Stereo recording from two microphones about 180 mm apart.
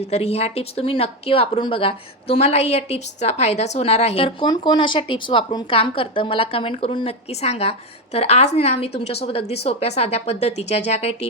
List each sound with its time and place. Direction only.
0.1 s a woman's voice: 35° left (ahead or behind)